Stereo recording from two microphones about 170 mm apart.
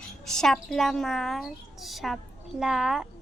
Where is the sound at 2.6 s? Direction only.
Centre (ahead or behind).